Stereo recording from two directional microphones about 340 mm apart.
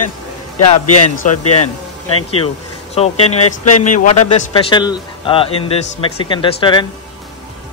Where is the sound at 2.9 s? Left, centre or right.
Centre.